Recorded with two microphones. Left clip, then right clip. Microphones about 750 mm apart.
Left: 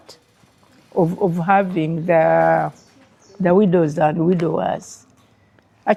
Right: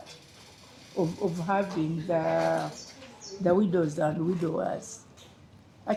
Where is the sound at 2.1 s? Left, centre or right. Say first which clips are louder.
Left 13 dB; left.